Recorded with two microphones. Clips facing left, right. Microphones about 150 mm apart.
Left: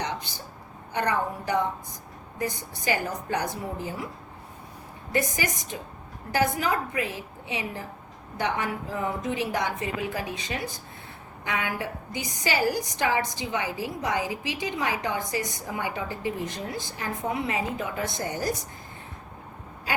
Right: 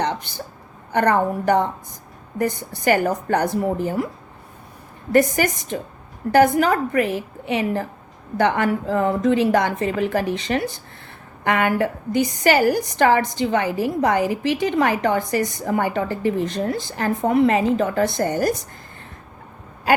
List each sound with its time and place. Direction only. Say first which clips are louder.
0.9 s a woman's voice: right 9 dB; 60° right (ahead or behind)
5.1 s a woman's voice: right 10 dB; 60° right (ahead or behind); by 18.5 s 75° right (ahead or behind)